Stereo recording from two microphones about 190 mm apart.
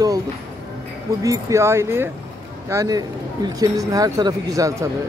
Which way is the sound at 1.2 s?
15° right (ahead or behind).